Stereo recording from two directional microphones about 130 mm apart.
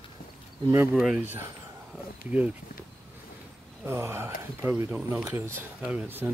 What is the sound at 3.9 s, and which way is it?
Speech, 20° right (ahead or behind).